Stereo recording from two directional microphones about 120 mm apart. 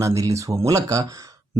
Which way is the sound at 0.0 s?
25° right (ahead or behind).